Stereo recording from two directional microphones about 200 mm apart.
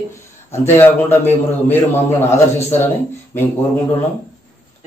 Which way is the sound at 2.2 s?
10° left (ahead or behind).